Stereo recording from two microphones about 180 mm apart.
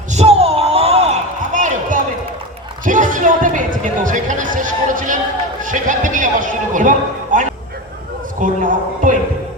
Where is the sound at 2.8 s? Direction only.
45° right (ahead or behind).